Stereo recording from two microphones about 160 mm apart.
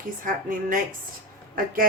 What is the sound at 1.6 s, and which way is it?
Speech, 60° right (ahead or behind).